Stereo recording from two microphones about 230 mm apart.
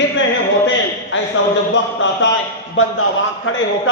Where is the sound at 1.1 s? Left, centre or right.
Left.